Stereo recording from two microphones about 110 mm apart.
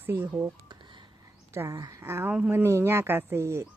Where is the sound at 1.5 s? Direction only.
25° right (ahead or behind).